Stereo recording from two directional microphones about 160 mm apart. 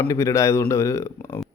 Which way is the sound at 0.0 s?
20° left (ahead or behind).